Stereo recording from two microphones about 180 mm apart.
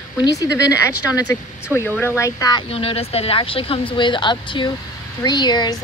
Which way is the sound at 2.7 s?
30° left (ahead or behind).